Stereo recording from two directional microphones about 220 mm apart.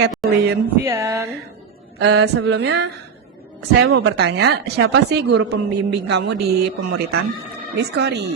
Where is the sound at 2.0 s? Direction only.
50° right (ahead or behind).